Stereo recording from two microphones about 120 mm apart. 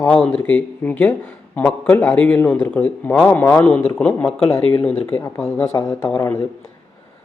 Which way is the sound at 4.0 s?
10° left (ahead or behind).